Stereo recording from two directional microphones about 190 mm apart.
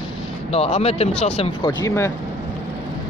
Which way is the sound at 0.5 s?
35° left (ahead or behind).